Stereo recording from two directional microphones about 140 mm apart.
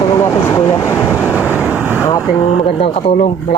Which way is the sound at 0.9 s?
5° right (ahead or behind).